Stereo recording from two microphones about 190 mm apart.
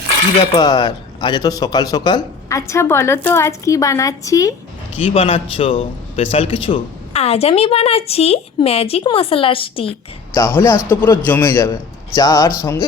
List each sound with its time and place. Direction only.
0.5 s speech: 20° left (ahead or behind)
5.0 s a man's voice: 30° left (ahead or behind)
10.3 s speech: 15° left (ahead or behind)